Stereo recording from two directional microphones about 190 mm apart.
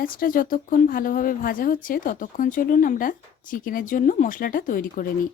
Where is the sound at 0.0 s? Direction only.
50° left (ahead or behind).